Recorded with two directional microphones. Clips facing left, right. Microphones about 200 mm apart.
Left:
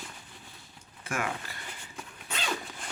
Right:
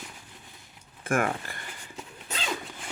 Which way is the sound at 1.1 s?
50° right (ahead or behind).